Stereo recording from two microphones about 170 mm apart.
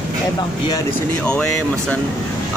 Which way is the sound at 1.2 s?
5° left (ahead or behind).